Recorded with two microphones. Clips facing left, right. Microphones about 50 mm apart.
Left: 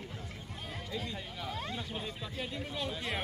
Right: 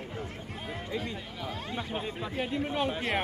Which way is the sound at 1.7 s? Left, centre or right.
Right.